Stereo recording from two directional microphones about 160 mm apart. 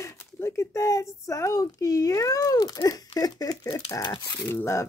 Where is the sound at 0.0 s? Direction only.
15° left (ahead or behind).